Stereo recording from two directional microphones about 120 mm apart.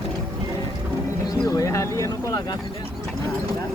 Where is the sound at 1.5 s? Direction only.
30° left (ahead or behind).